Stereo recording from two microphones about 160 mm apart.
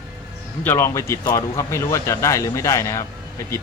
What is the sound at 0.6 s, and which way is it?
Speech, 15° left (ahead or behind).